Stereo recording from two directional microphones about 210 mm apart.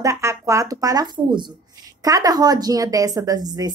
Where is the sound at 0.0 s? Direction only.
15° right (ahead or behind).